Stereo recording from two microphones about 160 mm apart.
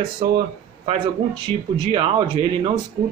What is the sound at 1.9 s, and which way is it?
Speech, 35° right (ahead or behind).